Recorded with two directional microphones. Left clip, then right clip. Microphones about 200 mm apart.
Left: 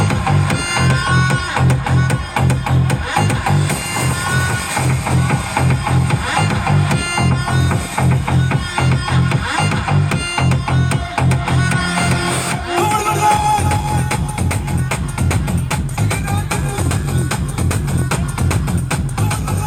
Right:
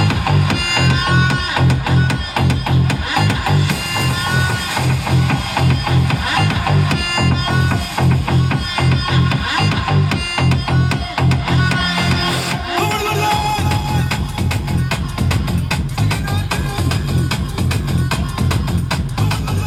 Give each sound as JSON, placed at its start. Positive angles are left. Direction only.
{"t": 0.0, "sound": "music", "side_deg": 35}